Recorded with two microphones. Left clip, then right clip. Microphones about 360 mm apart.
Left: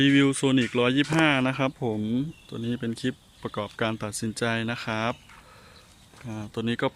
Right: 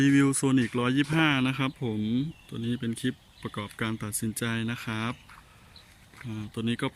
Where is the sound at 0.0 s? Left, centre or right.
Centre.